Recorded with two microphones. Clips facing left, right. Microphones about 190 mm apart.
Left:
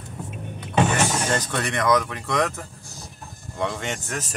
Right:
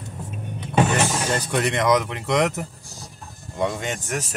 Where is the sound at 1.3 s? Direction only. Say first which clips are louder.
Right 2 dB; 15° right (ahead or behind).